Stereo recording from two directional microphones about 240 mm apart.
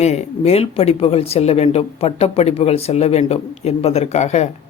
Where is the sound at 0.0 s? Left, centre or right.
Left.